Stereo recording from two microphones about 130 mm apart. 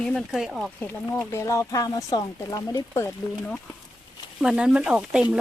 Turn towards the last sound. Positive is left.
turn(degrees=-10)  # may be behind; listen again after turning